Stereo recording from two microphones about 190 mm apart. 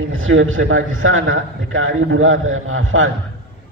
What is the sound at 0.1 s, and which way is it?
A man's voice, 90° right.